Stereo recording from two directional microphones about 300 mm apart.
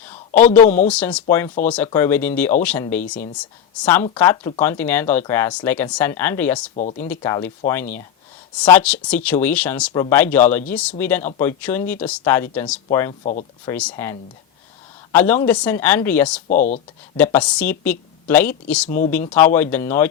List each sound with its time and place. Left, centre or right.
0.9 s speech: centre
6.7 s speech: left
7.1 s a woman's voice: centre
16.5 s speech: left
17.2 s speech: centre
18.9 s speech: left
19.1 s speech: centre